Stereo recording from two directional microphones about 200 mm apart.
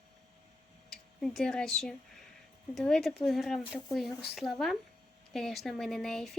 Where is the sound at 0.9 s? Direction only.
5° left (ahead or behind).